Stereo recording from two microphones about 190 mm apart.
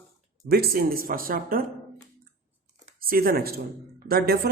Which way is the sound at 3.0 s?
50° right (ahead or behind).